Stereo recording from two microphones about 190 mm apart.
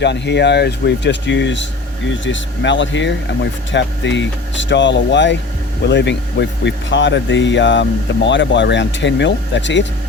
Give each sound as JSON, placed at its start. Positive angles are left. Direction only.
{"t": 0.0, "sound": "speech", "side_deg": 65}